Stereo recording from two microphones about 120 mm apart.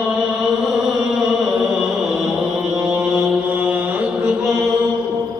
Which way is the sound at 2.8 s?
10° right (ahead or behind).